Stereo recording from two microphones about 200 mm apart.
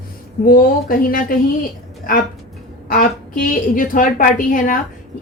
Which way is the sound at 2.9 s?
45° left (ahead or behind).